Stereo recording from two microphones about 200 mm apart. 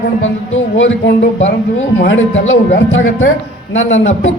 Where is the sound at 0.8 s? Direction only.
70° left (ahead or behind).